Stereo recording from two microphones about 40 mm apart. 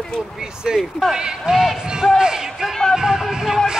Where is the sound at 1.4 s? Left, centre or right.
Centre.